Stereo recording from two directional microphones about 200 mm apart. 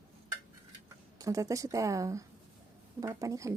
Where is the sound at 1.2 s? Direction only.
15° right (ahead or behind).